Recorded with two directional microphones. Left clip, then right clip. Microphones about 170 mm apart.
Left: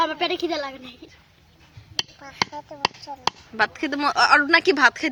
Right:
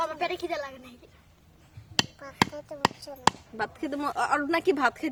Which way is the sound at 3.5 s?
Centre (ahead or behind).